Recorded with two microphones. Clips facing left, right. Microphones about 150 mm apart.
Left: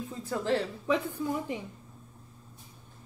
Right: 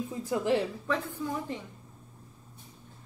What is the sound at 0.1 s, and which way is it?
Speech, 15° right (ahead or behind).